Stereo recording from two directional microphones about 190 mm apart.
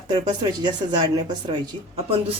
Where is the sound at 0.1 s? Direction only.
25° right (ahead or behind).